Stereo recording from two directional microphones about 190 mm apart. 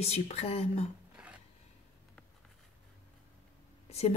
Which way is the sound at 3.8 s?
35° left (ahead or behind).